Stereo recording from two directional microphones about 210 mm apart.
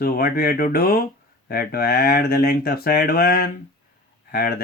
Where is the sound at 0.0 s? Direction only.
45° left (ahead or behind).